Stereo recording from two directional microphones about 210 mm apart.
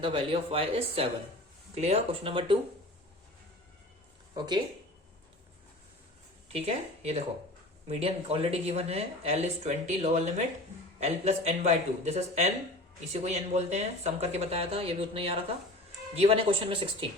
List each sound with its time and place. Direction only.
0.0 s speech: 25° right (ahead or behind)
4.4 s speech: 20° right (ahead or behind)
6.5 s speech: 30° right (ahead or behind)